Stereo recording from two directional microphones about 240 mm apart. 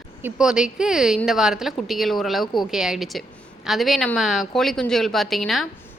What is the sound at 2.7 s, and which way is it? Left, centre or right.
A woman's voice, centre.